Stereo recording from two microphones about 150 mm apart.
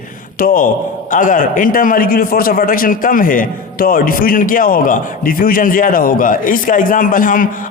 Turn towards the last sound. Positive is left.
turn(degrees=65)  # may be behind; listen again after turning